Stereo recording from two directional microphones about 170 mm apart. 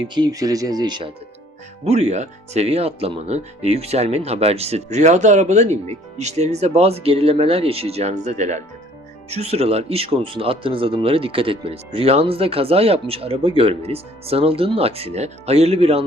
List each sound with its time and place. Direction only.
0.0 s speech: 25° right (ahead or behind)
1.8 s speech: 40° right (ahead or behind)